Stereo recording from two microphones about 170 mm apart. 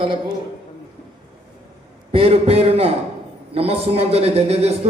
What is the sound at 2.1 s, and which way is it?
A man's voice, 35° right (ahead or behind).